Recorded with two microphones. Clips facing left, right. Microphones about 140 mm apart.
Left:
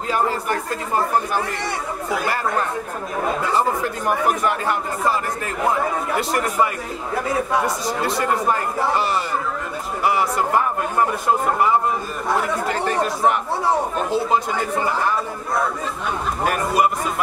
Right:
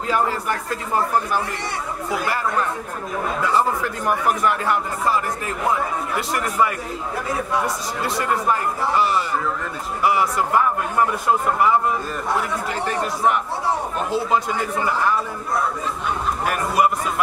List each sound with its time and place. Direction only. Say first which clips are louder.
3.5 s a man's voice: even; 20° left (ahead or behind)
6.1 s a man's voice: even; 25° left (ahead or behind)
12.8 s a man's voice: left 1 dB; 30° left (ahead or behind)